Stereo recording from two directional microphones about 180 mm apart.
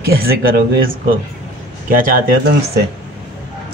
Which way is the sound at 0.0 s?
55° right (ahead or behind).